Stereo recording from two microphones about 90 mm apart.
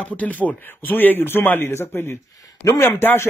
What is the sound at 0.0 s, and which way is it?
A man's voice, 15° left (ahead or behind).